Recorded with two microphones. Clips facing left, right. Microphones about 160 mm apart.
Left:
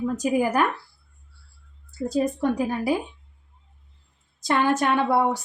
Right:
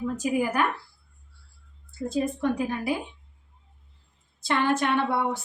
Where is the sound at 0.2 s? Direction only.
40° left (ahead or behind).